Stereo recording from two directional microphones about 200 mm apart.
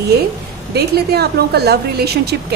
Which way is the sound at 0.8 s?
50° right (ahead or behind).